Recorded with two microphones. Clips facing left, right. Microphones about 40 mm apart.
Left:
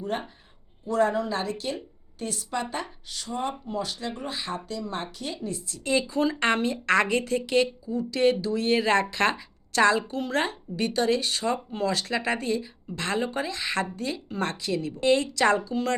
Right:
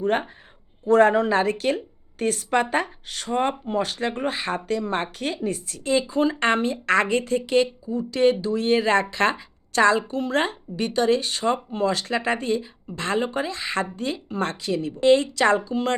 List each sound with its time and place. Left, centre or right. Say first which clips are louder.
0.0 s a woman's voice: right 8 dB; right
6.0 s speech: right 3 dB; right